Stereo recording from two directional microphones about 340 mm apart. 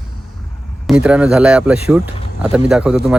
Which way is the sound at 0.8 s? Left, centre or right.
Centre.